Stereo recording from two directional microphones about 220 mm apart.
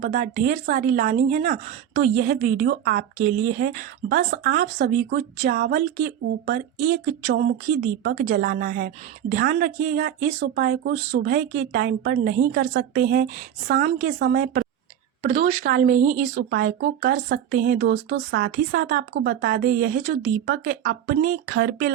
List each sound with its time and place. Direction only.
0.0 s a woman's voice: 35° right (ahead or behind)
15.2 s a woman's voice: 30° right (ahead or behind)